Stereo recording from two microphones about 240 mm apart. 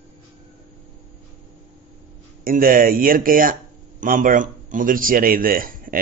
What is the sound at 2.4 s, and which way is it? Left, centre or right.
Speech, right.